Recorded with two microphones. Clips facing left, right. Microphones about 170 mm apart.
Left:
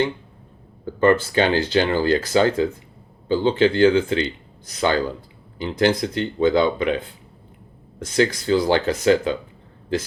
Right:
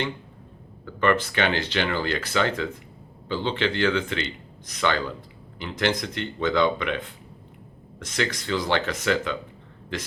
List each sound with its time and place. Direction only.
0.9 s speech: 30° left (ahead or behind)